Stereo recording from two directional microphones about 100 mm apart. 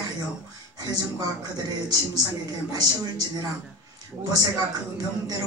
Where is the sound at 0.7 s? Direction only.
40° right (ahead or behind).